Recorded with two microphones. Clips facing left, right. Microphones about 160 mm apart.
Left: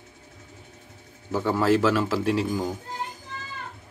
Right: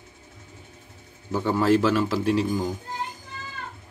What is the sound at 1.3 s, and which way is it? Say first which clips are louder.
A man's voice: right 1 dB; centre (ahead or behind).